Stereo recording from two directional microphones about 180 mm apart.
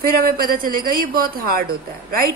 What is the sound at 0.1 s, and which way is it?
A woman's voice, 55° right (ahead or behind).